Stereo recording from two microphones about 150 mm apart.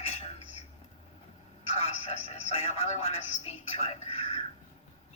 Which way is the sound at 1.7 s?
45° left (ahead or behind).